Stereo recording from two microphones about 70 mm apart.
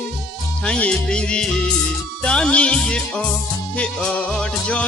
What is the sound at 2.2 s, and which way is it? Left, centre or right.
Speech, centre.